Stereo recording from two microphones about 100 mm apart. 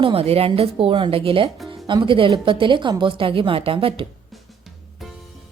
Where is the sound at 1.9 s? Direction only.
55° right (ahead or behind).